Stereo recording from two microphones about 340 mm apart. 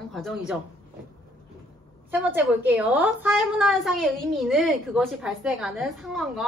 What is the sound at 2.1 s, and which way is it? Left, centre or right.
A woman's voice, centre.